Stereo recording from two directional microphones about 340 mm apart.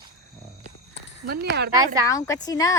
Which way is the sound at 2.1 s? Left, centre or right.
Centre.